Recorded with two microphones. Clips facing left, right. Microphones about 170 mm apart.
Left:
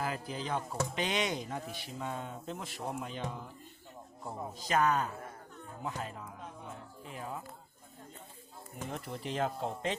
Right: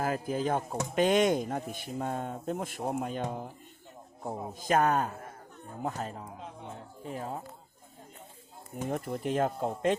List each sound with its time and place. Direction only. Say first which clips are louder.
0.0 s speech: right 7 dB; 45° right (ahead or behind)
8.7 s speech: right 7 dB; 50° right (ahead or behind)